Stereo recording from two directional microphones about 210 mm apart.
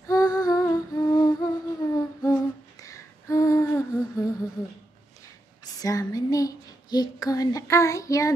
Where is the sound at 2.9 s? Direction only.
15° left (ahead or behind).